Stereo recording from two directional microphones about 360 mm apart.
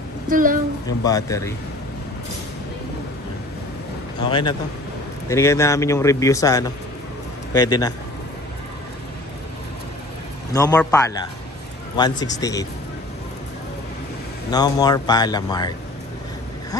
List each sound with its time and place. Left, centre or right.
0.3 s a woman's voice: right
1.0 s a man's voice: centre
4.3 s a man's voice: centre
10.5 s a man's voice: centre
14.5 s a man's voice: centre